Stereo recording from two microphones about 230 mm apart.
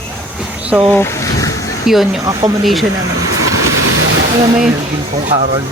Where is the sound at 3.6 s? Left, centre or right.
Right.